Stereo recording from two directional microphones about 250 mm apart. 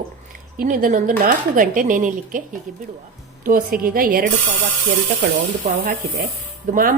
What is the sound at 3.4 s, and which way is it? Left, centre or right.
Speech, right.